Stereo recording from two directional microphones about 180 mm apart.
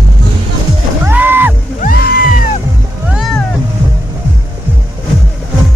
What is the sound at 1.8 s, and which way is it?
Music, 55° left (ahead or behind).